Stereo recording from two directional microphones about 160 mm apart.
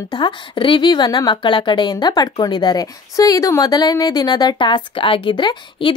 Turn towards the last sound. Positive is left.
turn(degrees=30)  # may be behind; listen again after turning